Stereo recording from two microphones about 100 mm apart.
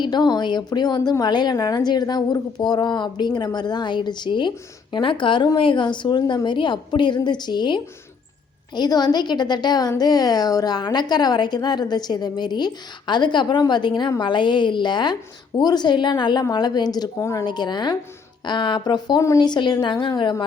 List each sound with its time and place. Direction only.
0.0 s a woman's voice: 45° left (ahead or behind)
17.2 s speech: 30° left (ahead or behind)
17.4 s a woman's voice: 45° left (ahead or behind)